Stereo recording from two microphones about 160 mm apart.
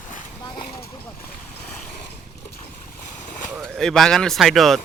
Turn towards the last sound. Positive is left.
turn(degrees=0)  # may be behind; listen again after turning